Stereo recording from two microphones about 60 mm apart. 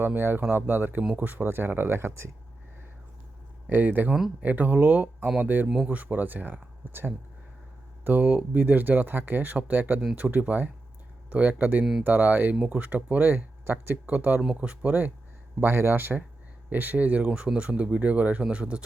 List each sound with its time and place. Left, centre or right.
0.0 s speech: right
3.7 s speech: right
5.6 s speech: centre
5.9 s speech: right
14.4 s speech: centre
15.6 s speech: right; by 18.8 s centre